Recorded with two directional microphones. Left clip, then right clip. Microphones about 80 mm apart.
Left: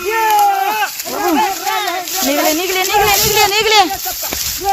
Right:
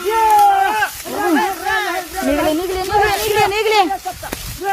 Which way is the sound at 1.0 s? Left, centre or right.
Centre.